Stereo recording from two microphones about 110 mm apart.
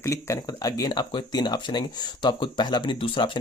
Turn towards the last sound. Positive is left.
turn(degrees=45)  # may be behind; listen again after turning